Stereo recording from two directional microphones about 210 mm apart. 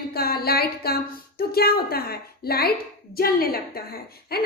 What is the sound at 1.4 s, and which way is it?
A woman's voice, 45° left (ahead or behind).